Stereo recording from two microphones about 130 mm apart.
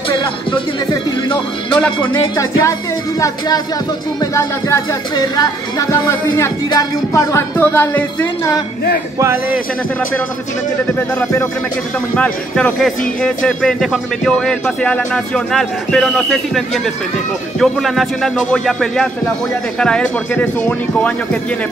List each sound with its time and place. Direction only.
2.2 s speech: 25° left (ahead or behind)
9.2 s speech: 20° right (ahead or behind)
12.2 s speech: 10° left (ahead or behind)